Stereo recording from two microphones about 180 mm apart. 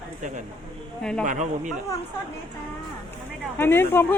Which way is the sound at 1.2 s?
45° right (ahead or behind).